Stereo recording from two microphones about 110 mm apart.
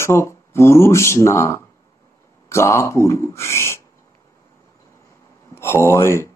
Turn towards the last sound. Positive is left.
turn(degrees=25)  # may be behind; listen again after turning